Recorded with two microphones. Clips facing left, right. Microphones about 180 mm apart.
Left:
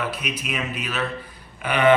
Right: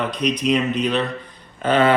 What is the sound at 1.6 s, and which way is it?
Speech, 15° left (ahead or behind).